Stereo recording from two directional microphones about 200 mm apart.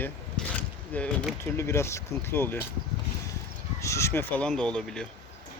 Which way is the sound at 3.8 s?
15° left (ahead or behind).